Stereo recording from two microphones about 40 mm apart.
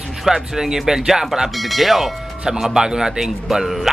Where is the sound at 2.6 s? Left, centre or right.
Centre.